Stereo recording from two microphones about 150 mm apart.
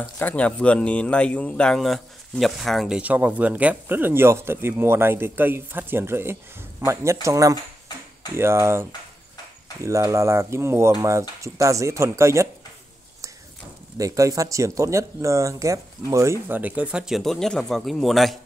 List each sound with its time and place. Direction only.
0.0 s speech: 10° left (ahead or behind); by 8.8 s 15° right (ahead or behind)
9.8 s speech: 20° right (ahead or behind)
13.9 s speech: 20° right (ahead or behind); by 18.4 s centre (ahead or behind)